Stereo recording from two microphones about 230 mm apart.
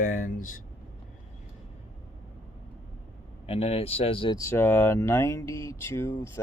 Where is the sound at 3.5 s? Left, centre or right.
Left.